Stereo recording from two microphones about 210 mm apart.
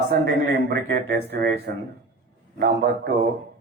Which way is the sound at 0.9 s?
50° right (ahead or behind).